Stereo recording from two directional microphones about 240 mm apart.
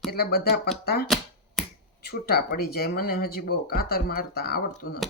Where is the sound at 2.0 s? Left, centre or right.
Left.